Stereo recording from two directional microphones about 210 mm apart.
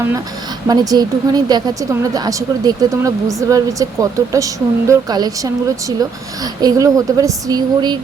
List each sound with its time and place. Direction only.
0.7 s speech: 20° right (ahead or behind)